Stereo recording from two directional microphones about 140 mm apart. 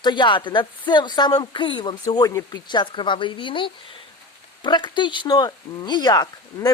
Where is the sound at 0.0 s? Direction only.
35° left (ahead or behind).